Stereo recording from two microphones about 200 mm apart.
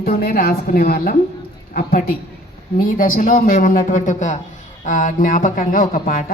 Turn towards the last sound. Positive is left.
turn(degrees=45)  # may be behind; listen again after turning